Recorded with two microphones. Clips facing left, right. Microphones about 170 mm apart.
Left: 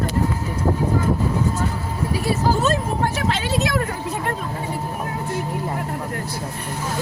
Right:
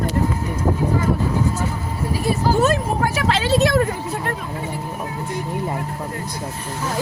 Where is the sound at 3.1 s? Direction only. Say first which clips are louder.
Right 4 dB; 90° right.